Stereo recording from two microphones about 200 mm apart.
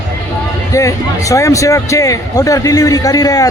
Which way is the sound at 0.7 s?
15° left (ahead or behind).